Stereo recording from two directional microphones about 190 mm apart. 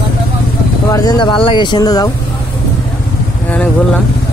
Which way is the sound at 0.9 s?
20° left (ahead or behind).